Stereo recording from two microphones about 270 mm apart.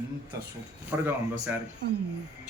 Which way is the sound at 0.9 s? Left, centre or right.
Centre.